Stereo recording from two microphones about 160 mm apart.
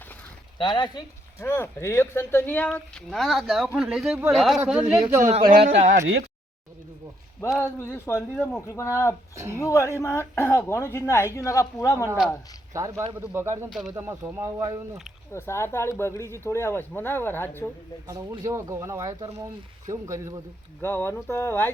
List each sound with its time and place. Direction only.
0.6 s speech: 25° left (ahead or behind)
1.5 s speech: 15° left (ahead or behind); by 5.2 s 10° right (ahead or behind)
5.2 s speech: 50° right (ahead or behind)
7.6 s speech: 15° left (ahead or behind)
9.3 s speech: 20° right (ahead or behind)
9.6 s speech: 20° left (ahead or behind)
12.7 s speech: 20° right (ahead or behind)
13.7 s speech: centre (ahead or behind)
13.9 s speech: 20° right (ahead or behind)
15.3 s speech: 15° left (ahead or behind)
18.1 s speech: 20° right (ahead or behind)
20.8 s speech: 15° left (ahead or behind)